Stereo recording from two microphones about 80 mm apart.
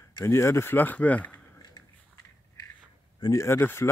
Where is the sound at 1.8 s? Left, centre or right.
Left.